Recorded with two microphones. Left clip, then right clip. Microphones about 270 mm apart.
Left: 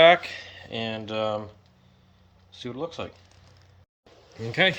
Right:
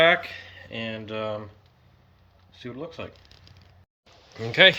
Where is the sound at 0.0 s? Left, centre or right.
Centre.